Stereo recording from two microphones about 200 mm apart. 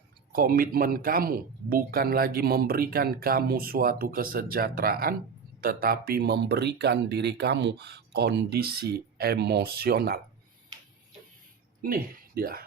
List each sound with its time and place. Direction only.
0.3 s speech: 45° right (ahead or behind)
11.8 s speech: 45° right (ahead or behind)